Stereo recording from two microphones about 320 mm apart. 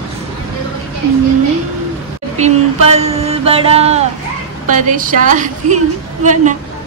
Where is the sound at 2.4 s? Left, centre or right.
Centre.